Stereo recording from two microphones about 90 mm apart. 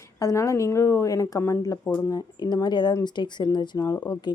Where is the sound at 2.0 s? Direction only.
45° left (ahead or behind).